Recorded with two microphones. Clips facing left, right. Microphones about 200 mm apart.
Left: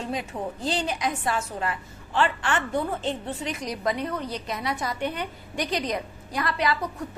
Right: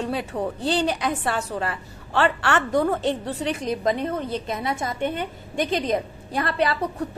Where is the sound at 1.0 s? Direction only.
65° right (ahead or behind).